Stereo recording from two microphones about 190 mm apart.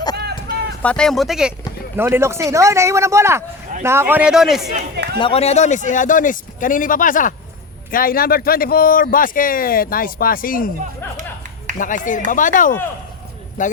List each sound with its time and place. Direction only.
0.2 s a sound: 60° right (ahead or behind)
0.8 s a man's voice: 5° left (ahead or behind)
5.2 s speech: 30° left (ahead or behind); by 10.7 s 50° left (ahead or behind)
11.8 s speech: 45° left (ahead or behind)